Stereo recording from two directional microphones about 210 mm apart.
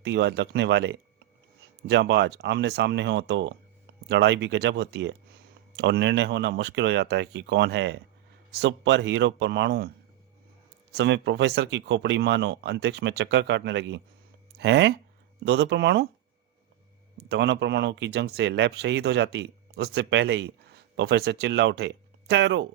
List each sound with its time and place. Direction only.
0.0 s speech: 55° right (ahead or behind)
10.9 s speech: 60° right (ahead or behind)
17.2 s speech: 55° right (ahead or behind)